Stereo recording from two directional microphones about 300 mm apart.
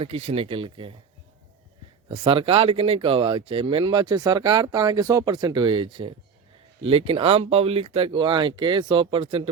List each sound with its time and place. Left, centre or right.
0.0 s speech: centre
2.0 s speech: centre